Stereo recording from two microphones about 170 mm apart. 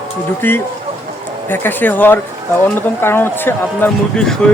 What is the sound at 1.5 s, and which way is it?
Speech, 10° left (ahead or behind).